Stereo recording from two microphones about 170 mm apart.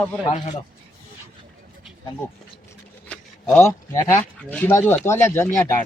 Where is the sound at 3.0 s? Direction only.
5° left (ahead or behind).